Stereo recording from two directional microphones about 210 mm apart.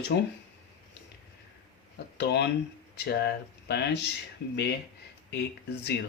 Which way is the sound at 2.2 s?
50° left (ahead or behind).